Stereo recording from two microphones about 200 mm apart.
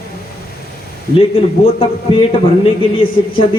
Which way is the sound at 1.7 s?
25° left (ahead or behind).